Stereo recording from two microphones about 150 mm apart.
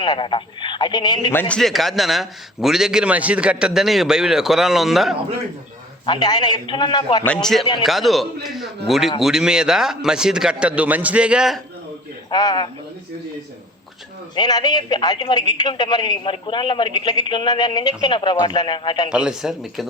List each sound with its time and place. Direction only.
0.0 s a man's voice: 30° left (ahead or behind)
1.3 s a man's voice: 10° left (ahead or behind)
6.1 s a man's voice: 25° left (ahead or behind)
7.9 s a man's voice: centre (ahead or behind)
12.3 s a man's voice: 30° left (ahead or behind)
14.3 s a man's voice: 30° left (ahead or behind)
19.1 s a man's voice: 5° right (ahead or behind)